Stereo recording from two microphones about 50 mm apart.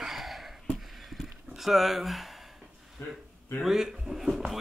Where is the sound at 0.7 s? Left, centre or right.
Centre.